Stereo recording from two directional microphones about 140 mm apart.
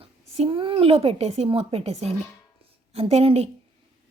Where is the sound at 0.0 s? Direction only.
40° right (ahead or behind).